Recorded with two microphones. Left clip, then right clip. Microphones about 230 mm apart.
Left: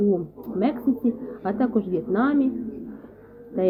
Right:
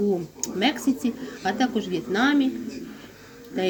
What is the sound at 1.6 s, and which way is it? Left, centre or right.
Speech, centre.